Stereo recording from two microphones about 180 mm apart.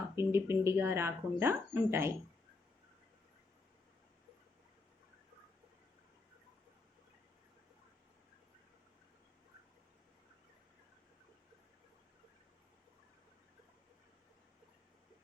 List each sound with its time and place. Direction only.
0.2 s speech: 15° right (ahead or behind)